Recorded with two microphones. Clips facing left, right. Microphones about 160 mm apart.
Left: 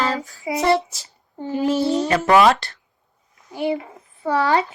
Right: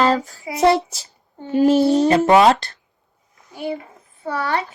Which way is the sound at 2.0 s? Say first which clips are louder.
Even; 25° right (ahead or behind).